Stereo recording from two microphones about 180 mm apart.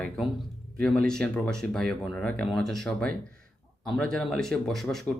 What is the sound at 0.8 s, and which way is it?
Speech, 5° left (ahead or behind).